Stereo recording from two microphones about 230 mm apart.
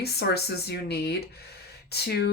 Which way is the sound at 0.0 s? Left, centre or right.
Left.